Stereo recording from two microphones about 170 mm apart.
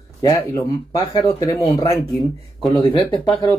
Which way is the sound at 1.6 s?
35° left (ahead or behind).